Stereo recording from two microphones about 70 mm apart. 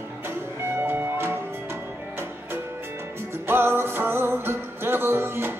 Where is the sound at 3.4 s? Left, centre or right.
Right.